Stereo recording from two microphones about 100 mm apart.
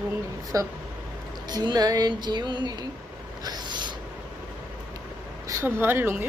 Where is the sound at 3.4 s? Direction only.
45° right (ahead or behind).